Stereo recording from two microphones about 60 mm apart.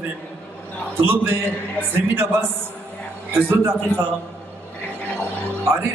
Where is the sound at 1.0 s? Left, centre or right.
Right.